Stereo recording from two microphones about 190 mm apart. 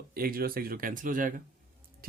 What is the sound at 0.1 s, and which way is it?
Speech, 50° right (ahead or behind).